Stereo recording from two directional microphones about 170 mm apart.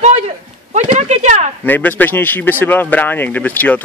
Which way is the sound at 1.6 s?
10° left (ahead or behind).